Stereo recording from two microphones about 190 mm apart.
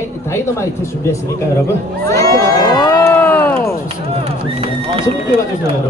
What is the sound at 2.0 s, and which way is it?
Crowd, 20° left (ahead or behind).